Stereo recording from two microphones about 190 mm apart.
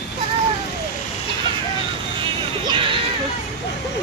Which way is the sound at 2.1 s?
25° right (ahead or behind).